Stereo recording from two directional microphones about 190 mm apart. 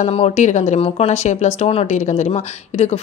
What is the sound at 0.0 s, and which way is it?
A woman's voice, 35° left (ahead or behind).